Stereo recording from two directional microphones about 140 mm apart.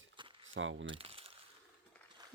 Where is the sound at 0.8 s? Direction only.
40° right (ahead or behind).